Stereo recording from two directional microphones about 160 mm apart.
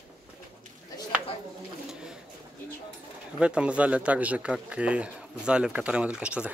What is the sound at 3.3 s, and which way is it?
Speech, 5° right (ahead or behind).